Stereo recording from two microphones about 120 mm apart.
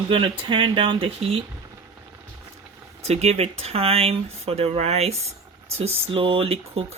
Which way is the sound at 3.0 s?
65° right (ahead or behind).